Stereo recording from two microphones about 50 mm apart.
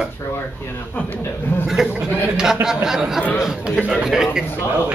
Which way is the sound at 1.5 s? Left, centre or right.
Left.